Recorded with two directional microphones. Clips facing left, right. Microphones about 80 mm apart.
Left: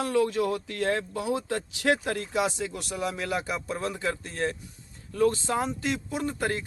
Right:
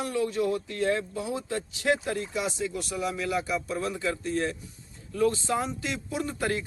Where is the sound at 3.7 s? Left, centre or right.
Left.